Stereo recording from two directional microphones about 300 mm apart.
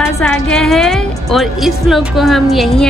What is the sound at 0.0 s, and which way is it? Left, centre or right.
Speech, centre.